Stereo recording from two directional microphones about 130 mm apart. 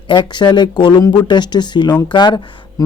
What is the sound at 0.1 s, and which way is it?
Speech, 35° left (ahead or behind).